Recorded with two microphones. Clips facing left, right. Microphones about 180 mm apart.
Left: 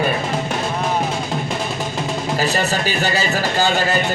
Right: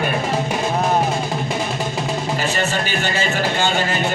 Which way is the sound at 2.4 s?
40° left (ahead or behind).